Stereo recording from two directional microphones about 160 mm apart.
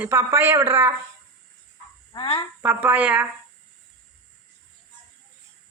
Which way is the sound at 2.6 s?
10° right (ahead or behind).